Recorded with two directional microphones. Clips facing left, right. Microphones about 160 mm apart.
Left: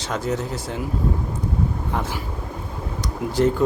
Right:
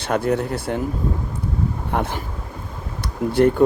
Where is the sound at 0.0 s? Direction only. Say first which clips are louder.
Right 5 dB; 60° right (ahead or behind).